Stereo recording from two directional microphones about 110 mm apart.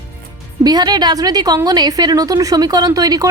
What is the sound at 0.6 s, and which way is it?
A woman's voice, 40° right (ahead or behind).